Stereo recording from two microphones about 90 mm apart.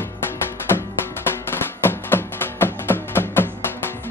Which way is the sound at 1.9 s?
25° left (ahead or behind).